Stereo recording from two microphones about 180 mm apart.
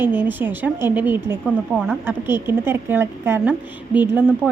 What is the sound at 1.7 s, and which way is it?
Speech, 5° left (ahead or behind).